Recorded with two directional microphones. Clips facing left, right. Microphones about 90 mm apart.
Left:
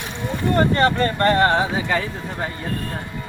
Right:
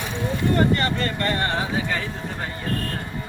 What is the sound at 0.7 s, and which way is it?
Speech, 30° left (ahead or behind).